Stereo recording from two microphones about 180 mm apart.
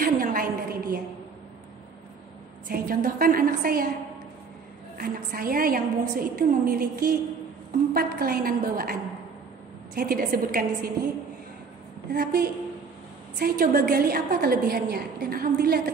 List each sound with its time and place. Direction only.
0.0 s a sound: 50° right (ahead or behind)
2.7 s a woman's voice: 55° right (ahead or behind)
4.9 s a woman's voice: 55° right (ahead or behind)
9.9 s a woman's voice: 55° right (ahead or behind)
12.1 s a woman's voice: 55° right (ahead or behind)